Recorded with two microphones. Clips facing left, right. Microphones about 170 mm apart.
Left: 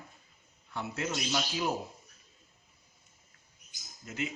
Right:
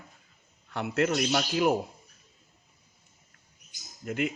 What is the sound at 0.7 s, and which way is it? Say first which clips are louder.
A man's voice: right 8 dB; 65° right (ahead or behind).